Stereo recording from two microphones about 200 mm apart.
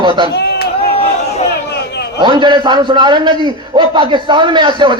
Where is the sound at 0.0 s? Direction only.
25° right (ahead or behind).